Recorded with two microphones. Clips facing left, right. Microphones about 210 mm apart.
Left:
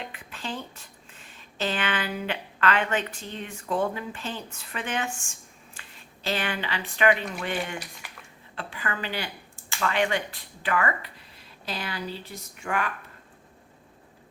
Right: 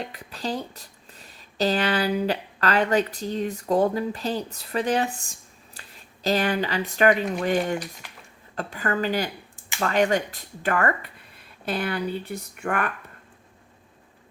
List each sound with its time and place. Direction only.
0.0 s speech: 40° right (ahead or behind)
9.6 s a sound: 20° right (ahead or behind)
9.8 s speech: 40° right (ahead or behind)